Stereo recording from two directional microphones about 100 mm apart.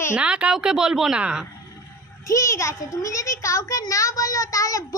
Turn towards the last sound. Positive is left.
turn(degrees=35)  # may be behind; listen again after turning